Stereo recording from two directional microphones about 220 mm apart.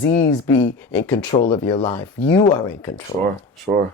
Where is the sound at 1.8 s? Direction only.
10° left (ahead or behind).